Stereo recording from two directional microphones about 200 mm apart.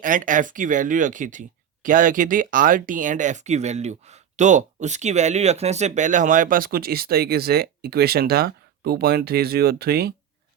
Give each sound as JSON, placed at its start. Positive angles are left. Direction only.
{"t": 0.0, "sound": "speech", "side_deg": -40}